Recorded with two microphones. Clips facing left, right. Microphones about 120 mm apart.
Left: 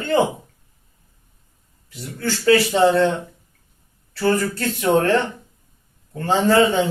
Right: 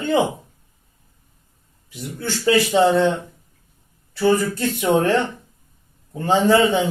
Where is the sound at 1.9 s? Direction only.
15° right (ahead or behind).